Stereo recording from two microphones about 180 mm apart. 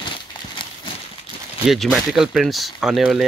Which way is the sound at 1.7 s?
Centre (ahead or behind).